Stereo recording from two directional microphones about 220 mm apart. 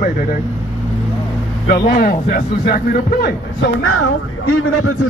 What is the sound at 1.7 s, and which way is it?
A man's voice, 45° left (ahead or behind).